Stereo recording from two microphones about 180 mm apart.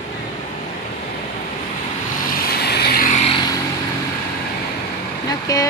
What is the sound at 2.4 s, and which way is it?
Vehicle, 60° left (ahead or behind).